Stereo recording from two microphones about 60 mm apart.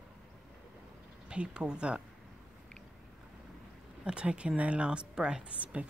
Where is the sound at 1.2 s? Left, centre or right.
Centre.